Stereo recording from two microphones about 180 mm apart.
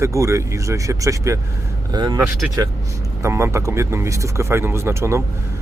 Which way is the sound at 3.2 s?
15° right (ahead or behind).